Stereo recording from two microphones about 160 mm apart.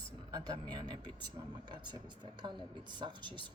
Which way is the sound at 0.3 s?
25° right (ahead or behind).